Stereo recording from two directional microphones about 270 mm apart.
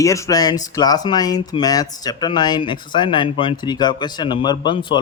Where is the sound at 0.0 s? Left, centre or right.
Centre.